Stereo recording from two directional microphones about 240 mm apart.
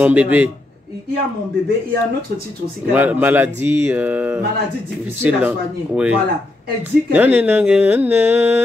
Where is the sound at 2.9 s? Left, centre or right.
Centre.